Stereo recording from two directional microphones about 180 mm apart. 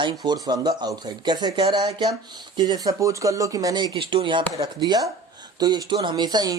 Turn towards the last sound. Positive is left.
turn(degrees=-20)  # may be behind; listen again after turning